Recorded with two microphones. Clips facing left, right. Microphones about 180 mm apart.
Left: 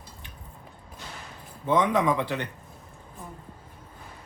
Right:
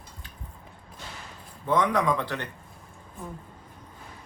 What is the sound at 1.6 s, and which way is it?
Speech, 20° left (ahead or behind).